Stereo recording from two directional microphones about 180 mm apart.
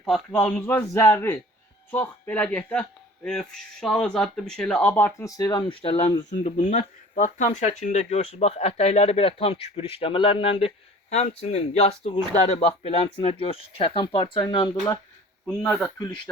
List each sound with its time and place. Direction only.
0.0 s a man's voice: 5° left (ahead or behind); by 14.9 s 25° left (ahead or behind)
15.4 s a man's voice: 5° left (ahead or behind)